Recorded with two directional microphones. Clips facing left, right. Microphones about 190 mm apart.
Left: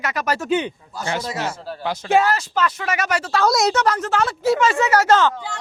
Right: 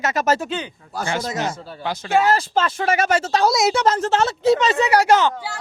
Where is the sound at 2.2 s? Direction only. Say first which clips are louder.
Right 2 dB; 30° right (ahead or behind).